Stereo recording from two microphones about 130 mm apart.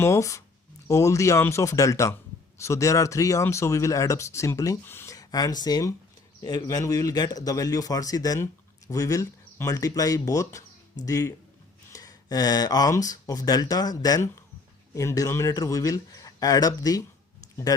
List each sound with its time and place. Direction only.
0.0 s speech: 25° left (ahead or behind)